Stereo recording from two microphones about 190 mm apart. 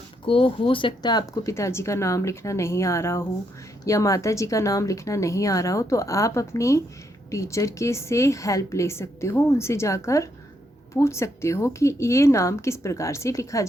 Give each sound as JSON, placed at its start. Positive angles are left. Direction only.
{"t": 0.3, "sound": "a woman's voice", "side_deg": 30}